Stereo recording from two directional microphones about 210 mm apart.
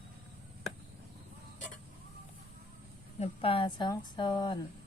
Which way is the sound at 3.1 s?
30° left (ahead or behind).